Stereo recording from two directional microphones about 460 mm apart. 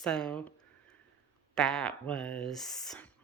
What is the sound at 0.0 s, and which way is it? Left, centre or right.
Speech, centre.